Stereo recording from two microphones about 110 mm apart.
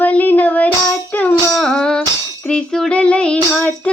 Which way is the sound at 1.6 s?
5° left (ahead or behind).